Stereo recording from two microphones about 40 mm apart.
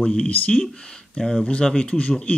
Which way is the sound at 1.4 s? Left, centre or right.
Left.